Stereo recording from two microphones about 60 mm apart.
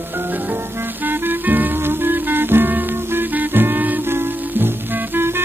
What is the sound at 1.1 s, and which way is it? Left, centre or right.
Music, right.